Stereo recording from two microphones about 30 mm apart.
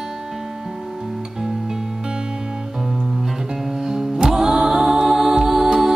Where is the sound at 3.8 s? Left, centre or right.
Centre.